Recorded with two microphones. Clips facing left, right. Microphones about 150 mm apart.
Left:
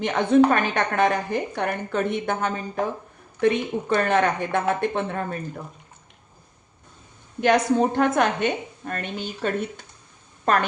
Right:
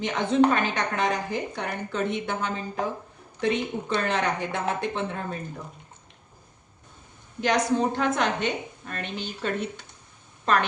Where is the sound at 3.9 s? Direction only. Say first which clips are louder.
Left 5 dB; 55° left (ahead or behind).